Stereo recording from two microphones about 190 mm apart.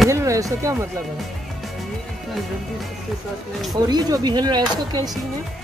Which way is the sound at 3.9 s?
20° right (ahead or behind).